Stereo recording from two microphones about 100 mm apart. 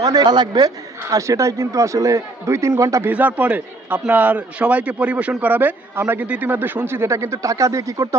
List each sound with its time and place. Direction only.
0.0 s a man's voice: 40° right (ahead or behind)
1.1 s a man's voice: 35° right (ahead or behind)
3.1 s a man's voice: 15° right (ahead or behind); by 8.2 s 30° right (ahead or behind)